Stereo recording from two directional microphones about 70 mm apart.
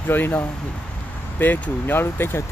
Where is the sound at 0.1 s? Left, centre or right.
Left.